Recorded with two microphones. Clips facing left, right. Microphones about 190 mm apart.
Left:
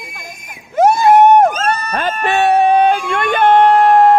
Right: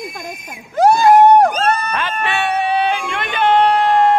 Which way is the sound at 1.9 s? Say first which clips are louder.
Left 4 dB; 45° left (ahead or behind).